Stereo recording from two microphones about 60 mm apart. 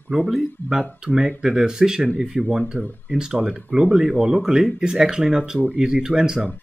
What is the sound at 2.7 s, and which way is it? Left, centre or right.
Speech, right.